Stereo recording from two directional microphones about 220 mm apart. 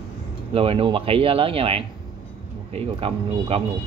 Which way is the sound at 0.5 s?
25° right (ahead or behind).